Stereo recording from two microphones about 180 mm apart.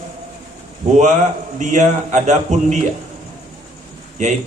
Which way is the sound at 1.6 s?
40° right (ahead or behind).